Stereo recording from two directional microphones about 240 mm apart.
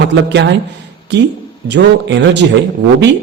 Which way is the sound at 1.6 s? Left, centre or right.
Right.